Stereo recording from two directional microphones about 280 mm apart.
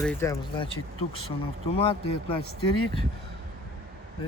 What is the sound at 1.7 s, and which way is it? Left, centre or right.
Speech, centre.